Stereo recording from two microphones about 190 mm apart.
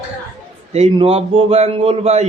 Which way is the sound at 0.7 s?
35° right (ahead or behind).